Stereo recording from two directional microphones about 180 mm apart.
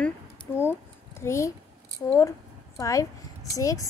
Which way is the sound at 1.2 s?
15° left (ahead or behind).